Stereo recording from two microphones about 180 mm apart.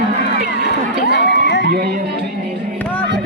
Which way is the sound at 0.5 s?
75° left (ahead or behind).